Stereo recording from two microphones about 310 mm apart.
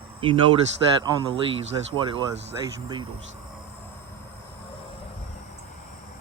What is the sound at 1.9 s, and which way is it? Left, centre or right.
Speech, centre.